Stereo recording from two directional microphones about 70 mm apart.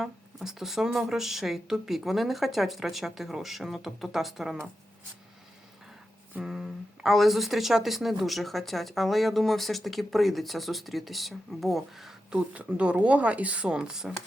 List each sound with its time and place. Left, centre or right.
0.0 s speech: centre
6.4 s speech: centre
12.3 s speech: centre